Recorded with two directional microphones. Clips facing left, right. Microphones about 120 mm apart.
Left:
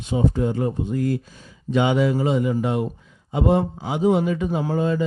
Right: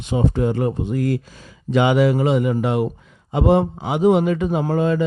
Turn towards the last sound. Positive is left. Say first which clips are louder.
# right 3 dB
turn(degrees=-70)  # may be behind; listen again after turning